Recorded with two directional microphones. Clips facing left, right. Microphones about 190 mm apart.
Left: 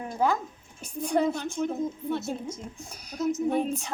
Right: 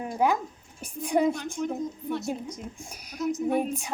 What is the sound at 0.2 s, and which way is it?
A woman's voice, 15° right (ahead or behind).